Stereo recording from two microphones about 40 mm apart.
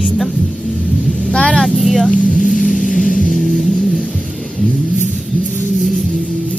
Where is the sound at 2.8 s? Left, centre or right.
Centre.